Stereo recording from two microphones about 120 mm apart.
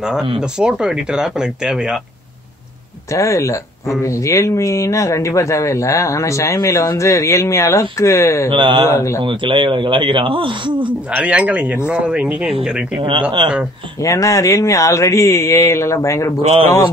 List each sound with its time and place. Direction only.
0.4 s speech: 5° right (ahead or behind)
3.1 s speech: 25° left (ahead or behind)
8.5 s speech: 40° right (ahead or behind)
8.8 s speech: 25° left (ahead or behind)
9.2 s speech: 45° right (ahead or behind)
10.9 s speech: 10° right (ahead or behind)
14.0 s speech: 25° left (ahead or behind)